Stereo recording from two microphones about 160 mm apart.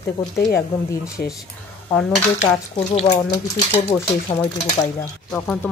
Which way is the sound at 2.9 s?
40° left (ahead or behind).